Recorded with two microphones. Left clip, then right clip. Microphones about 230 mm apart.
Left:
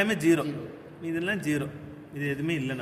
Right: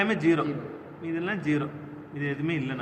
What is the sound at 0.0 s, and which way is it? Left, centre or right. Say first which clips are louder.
A man's voice: even; left.